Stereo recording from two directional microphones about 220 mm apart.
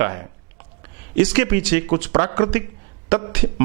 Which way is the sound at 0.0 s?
15° right (ahead or behind).